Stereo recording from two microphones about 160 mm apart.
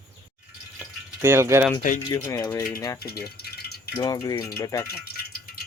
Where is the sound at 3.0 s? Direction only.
75° left (ahead or behind).